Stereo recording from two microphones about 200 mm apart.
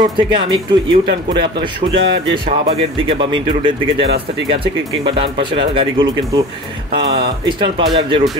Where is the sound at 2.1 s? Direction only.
55° right (ahead or behind).